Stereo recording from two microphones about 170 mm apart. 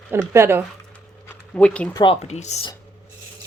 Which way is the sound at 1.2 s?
5° left (ahead or behind).